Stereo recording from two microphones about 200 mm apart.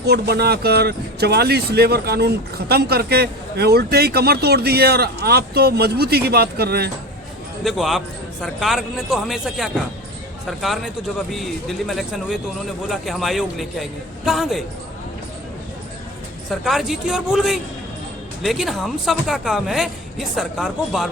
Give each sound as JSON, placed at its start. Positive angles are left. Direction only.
{"t": 0.0, "sound": "speech", "side_deg": -55}
{"t": 7.6, "sound": "speech", "side_deg": 0}
{"t": 16.5, "sound": "speech", "side_deg": 0}